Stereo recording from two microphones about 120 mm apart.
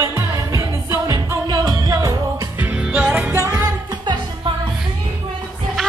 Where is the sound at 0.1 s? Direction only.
25° right (ahead or behind).